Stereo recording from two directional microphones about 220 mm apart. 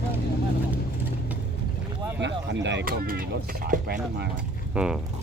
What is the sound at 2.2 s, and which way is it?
Speech, 55° right (ahead or behind).